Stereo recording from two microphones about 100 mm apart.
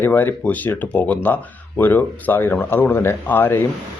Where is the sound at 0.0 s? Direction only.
20° left (ahead or behind).